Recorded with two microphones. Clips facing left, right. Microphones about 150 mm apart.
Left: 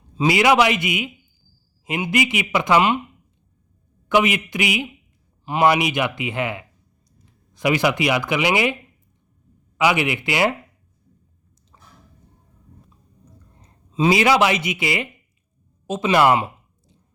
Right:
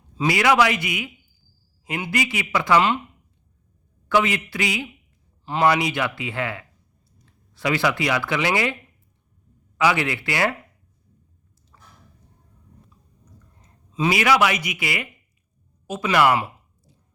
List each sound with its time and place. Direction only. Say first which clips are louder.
0.2 s a man's voice: left 2 dB; 20° left (ahead or behind)
4.1 s speech: left 2 dB; 20° left (ahead or behind)
9.7 s speech: left 2 dB; 15° left (ahead or behind)
11.7 s a sound: left 1 dB; 20° left (ahead or behind)
13.9 s a man's voice: left 3 dB; 25° left (ahead or behind)
15.9 s a sound: left 2 dB; 25° left (ahead or behind)